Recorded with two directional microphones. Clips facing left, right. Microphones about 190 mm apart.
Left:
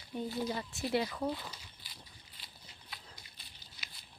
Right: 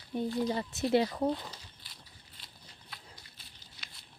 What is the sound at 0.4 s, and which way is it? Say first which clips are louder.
Speech: right 5 dB; 30° right (ahead or behind).